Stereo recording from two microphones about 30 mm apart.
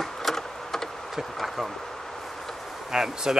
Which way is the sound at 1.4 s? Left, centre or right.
Centre.